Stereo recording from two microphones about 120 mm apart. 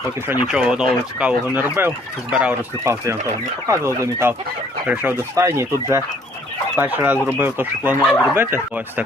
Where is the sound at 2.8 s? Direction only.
25° right (ahead or behind).